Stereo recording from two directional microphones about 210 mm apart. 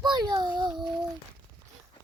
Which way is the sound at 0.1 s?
20° right (ahead or behind).